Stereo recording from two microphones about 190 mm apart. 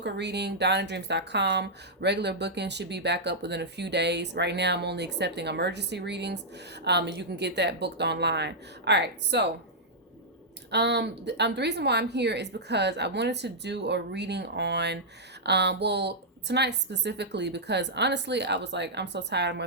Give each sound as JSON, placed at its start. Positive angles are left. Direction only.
{"t": 0.0, "sound": "a woman's voice", "side_deg": -65}
{"t": 10.7, "sound": "a woman's voice", "side_deg": -65}